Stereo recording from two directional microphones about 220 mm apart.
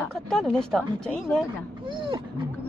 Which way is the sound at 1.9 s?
20° right (ahead or behind).